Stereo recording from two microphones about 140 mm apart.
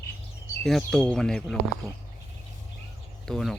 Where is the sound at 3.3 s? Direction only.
Centre (ahead or behind).